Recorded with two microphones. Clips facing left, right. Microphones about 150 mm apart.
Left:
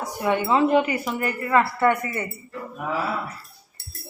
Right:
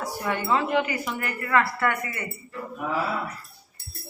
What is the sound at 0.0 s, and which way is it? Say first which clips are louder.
Speech: left 5 dB; 20° left (ahead or behind).